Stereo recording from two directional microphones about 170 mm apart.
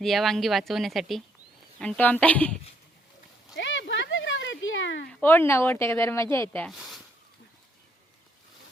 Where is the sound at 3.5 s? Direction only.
90° left.